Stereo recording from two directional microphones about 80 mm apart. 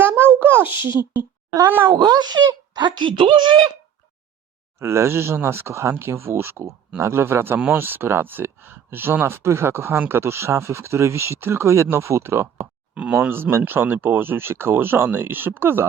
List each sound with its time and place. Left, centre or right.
0.0 s a sound: right
1.6 s speech: right
1.9 s speech: right
4.8 s speech: right
12.9 s speech: centre
13.1 s speech: right